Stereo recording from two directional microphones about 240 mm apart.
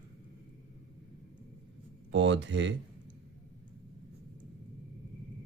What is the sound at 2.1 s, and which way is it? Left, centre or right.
Speech, right.